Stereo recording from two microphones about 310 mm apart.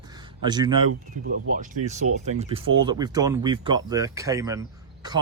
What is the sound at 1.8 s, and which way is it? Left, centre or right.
Speech, right.